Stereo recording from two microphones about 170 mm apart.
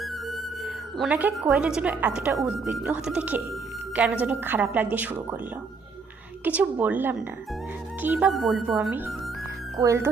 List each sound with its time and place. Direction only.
0.0 s music: centre (ahead or behind)
2.4 s a woman's voice: 5° right (ahead or behind)
6.4 s a woman's voice: 10° right (ahead or behind)
9.7 s a woman's voice: 20° right (ahead or behind)